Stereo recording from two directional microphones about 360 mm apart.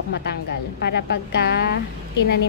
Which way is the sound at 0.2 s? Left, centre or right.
Left.